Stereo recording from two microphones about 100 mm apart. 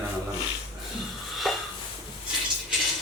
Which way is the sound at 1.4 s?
Centre (ahead or behind).